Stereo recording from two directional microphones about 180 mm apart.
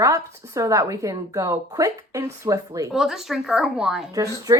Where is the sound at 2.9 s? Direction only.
Centre (ahead or behind).